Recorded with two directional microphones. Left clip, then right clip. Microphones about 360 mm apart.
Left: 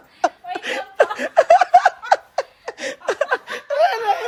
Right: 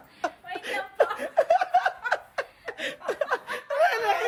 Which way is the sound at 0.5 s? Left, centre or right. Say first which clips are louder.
Left 7 dB; left.